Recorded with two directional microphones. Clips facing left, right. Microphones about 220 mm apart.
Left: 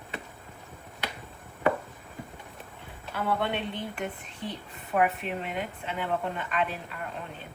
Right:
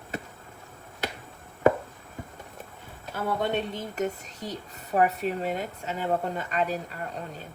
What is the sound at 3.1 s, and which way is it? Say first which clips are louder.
Speech: right 2 dB; 40° right (ahead or behind).